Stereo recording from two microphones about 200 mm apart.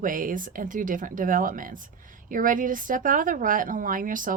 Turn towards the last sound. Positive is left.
turn(degrees=-40)  # may be behind; listen again after turning